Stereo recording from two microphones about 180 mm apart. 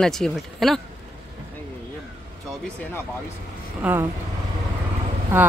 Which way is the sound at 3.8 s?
5° right (ahead or behind).